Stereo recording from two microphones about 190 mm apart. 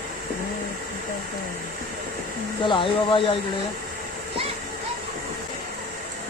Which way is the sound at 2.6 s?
25° left (ahead or behind).